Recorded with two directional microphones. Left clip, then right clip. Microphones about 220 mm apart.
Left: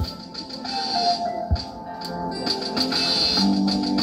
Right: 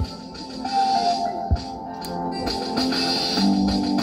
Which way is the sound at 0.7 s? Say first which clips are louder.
Right 3 dB; 30° left (ahead or behind).